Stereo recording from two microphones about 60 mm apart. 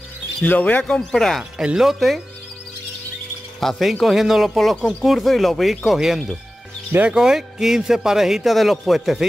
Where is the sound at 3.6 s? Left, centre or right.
Centre.